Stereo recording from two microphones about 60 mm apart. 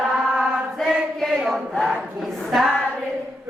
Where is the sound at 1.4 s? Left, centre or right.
Centre.